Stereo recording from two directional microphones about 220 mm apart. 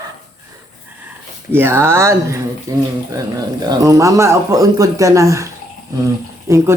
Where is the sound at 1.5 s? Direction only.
10° right (ahead or behind).